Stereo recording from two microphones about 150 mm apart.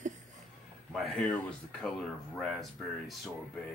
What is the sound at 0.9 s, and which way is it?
Speech, centre (ahead or behind).